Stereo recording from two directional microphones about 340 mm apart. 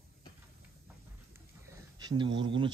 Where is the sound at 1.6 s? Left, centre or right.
Centre.